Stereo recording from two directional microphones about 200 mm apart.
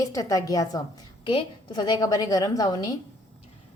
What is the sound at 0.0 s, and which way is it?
A woman's voice, 15° left (ahead or behind).